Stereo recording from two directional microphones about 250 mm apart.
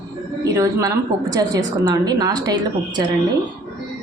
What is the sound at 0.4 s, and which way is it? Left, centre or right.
A woman's voice, centre.